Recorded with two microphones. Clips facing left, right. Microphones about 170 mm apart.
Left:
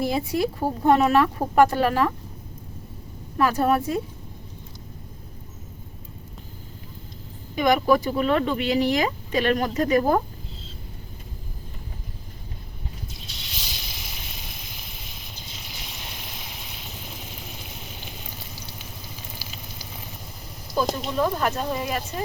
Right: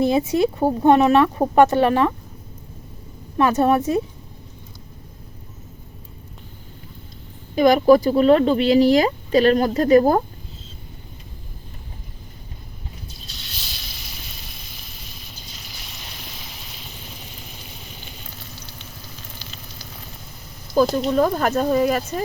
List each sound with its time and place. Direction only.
0.0 s speech: 20° right (ahead or behind)
3.3 s speech: 25° right (ahead or behind)
7.5 s speech: 35° right (ahead or behind)
19.4 s frying: 10° left (ahead or behind)
20.7 s speech: 45° right (ahead or behind)